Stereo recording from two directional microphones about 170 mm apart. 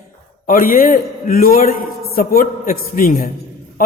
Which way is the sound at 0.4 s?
55° left (ahead or behind).